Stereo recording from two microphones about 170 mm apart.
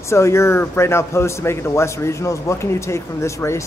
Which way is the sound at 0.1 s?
15° left (ahead or behind).